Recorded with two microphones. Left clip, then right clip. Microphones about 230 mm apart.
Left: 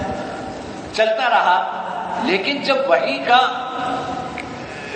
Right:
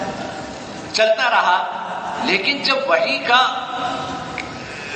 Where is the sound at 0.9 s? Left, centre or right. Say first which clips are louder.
Right 1 dB; right.